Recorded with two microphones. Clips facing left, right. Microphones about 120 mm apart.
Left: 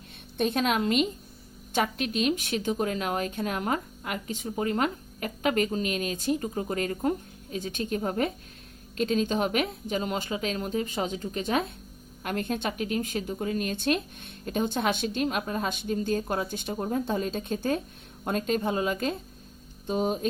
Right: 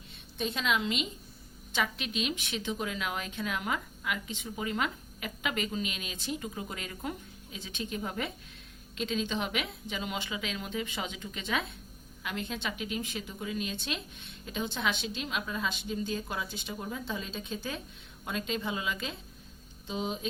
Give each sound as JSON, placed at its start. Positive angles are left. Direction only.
{"t": 0.3, "sound": "a woman's voice", "side_deg": 50}